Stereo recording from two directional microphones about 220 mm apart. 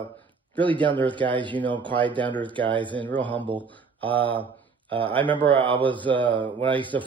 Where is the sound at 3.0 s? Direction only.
5° left (ahead or behind).